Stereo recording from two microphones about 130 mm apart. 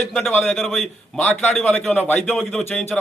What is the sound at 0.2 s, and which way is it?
Speech, 15° left (ahead or behind).